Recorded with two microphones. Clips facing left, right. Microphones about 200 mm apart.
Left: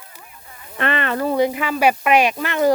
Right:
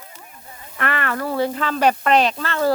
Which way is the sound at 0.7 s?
20° left (ahead or behind).